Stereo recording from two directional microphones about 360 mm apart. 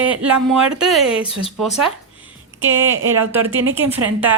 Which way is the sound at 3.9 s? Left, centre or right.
Centre.